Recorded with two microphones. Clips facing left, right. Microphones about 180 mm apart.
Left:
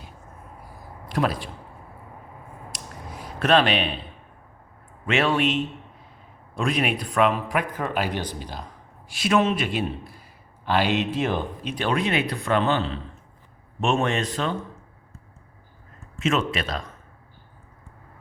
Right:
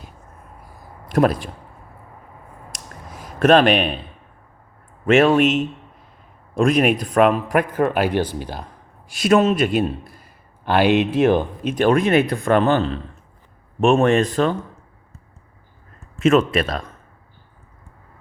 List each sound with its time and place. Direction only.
1.0 s speech: 50° right (ahead or behind)
2.7 s a sound: 45° right (ahead or behind)
5.0 s speech: 45° right (ahead or behind)
6.6 s speech: 45° right (ahead or behind)
10.7 s speech: 60° right (ahead or behind)
16.1 s speech: 55° right (ahead or behind)